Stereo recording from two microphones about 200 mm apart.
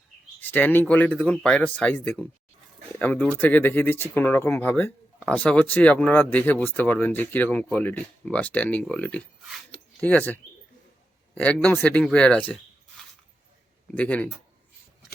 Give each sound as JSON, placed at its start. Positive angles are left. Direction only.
{"t": 0.3, "sound": "speech", "side_deg": 10}
{"t": 13.9, "sound": "speech", "side_deg": 5}